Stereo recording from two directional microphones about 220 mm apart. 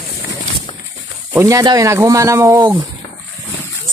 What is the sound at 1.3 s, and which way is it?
Speech, 15° right (ahead or behind).